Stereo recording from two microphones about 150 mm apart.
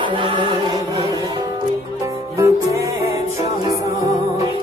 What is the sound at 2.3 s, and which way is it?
Music, 20° right (ahead or behind).